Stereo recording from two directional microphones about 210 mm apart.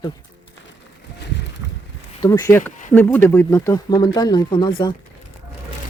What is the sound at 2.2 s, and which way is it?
Speech, 15° left (ahead or behind).